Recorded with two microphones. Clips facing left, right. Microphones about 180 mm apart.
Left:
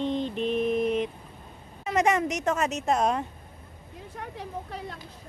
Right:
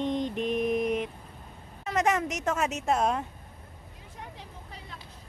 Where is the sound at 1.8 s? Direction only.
Centre (ahead or behind).